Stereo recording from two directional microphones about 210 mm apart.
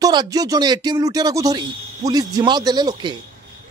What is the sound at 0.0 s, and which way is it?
Speech, 20° right (ahead or behind).